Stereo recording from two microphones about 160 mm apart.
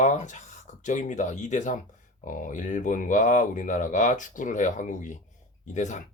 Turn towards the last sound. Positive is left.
turn(degrees=50)  # may be behind; listen again after turning